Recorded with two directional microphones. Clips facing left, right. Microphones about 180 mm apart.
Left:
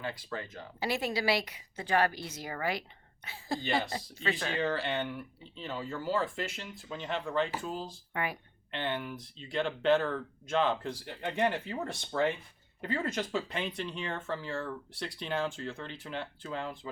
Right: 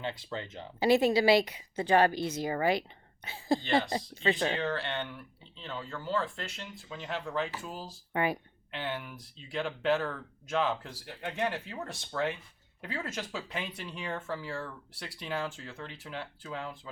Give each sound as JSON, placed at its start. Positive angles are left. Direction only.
{"t": 0.0, "sound": "speech", "side_deg": -25}
{"t": 4.6, "sound": "speech", "side_deg": 5}
{"t": 8.1, "sound": "speech", "side_deg": -25}
{"t": 8.7, "sound": "speech", "side_deg": -5}